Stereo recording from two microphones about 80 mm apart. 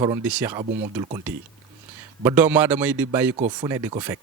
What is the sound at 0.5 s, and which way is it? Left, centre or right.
Speech, right.